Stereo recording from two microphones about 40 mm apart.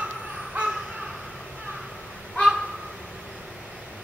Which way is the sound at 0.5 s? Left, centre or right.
Right.